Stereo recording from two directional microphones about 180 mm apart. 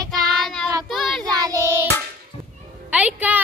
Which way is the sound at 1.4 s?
20° right (ahead or behind).